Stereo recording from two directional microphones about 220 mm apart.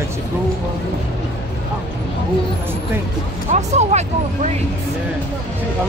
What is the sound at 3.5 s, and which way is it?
Speech, 30° right (ahead or behind).